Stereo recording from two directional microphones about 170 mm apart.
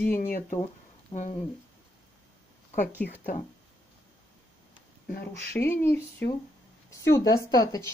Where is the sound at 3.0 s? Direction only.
65° left (ahead or behind).